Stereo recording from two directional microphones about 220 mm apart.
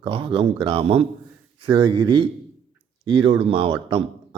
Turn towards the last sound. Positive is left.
turn(degrees=-25)  # may be behind; listen again after turning